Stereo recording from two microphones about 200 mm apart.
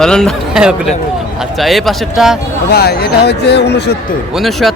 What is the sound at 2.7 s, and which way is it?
Speech, 50° left (ahead or behind).